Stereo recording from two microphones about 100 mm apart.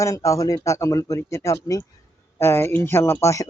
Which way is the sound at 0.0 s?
30° left (ahead or behind).